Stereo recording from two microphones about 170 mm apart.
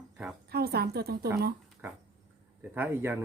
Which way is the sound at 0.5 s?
70° right (ahead or behind).